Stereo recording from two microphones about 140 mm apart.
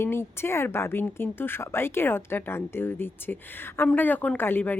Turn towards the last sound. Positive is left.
turn(degrees=15)  # may be behind; listen again after turning